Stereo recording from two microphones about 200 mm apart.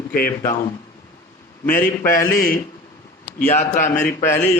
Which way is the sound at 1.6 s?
40° left (ahead or behind).